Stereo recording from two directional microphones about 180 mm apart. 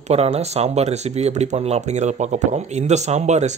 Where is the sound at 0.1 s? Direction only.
35° right (ahead or behind).